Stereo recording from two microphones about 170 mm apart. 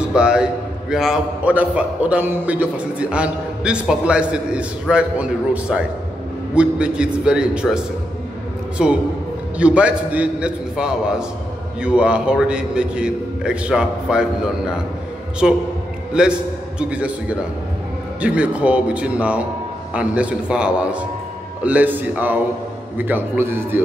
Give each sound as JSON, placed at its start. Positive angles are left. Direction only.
{"t": 0.0, "sound": "a man's voice", "side_deg": -5}